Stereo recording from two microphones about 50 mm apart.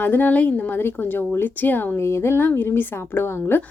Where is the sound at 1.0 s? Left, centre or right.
Left.